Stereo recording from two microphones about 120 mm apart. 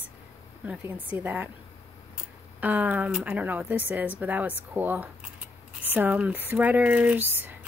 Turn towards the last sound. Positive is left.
turn(degrees=-15)  # may be behind; listen again after turning